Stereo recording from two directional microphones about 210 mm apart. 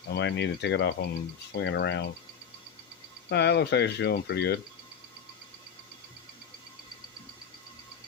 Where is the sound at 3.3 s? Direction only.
50° left (ahead or behind).